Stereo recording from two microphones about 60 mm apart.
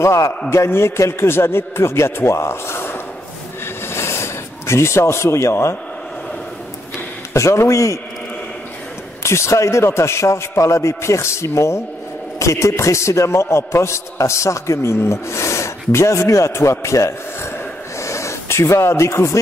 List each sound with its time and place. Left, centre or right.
0.0 s a man's voice: left
0.5 s a man's voice: left
3.9 s a sound: left
7.3 s a man's voice: left
9.2 s a man's voice: left